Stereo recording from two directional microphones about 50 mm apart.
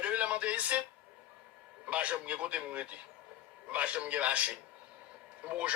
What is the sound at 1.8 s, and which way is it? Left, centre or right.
Speech, right.